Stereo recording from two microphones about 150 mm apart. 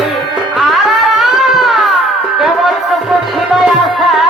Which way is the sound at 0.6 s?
Centre (ahead or behind).